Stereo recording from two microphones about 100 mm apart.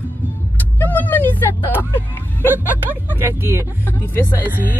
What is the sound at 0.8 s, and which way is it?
Speech, 20° left (ahead or behind).